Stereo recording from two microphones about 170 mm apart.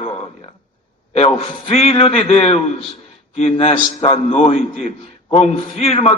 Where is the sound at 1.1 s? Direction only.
35° left (ahead or behind).